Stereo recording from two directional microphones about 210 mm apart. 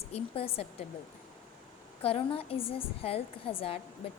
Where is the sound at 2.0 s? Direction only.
25° left (ahead or behind).